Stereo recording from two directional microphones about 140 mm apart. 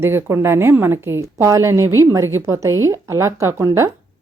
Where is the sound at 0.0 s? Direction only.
15° right (ahead or behind).